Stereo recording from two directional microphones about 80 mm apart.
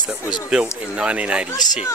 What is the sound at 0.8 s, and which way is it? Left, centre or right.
Speech, centre.